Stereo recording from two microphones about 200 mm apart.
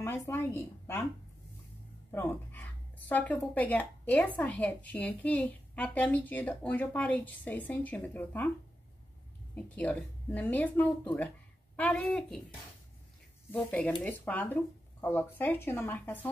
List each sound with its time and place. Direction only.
0.0 s speech: 15° left (ahead or behind)
2.1 s speech: 10° left (ahead or behind)
9.6 s a woman's voice: 10° left (ahead or behind)
13.5 s speech: 10° left (ahead or behind)